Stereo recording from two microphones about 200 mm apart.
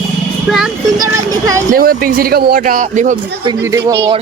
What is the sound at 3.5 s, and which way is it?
Speech, 15° right (ahead or behind).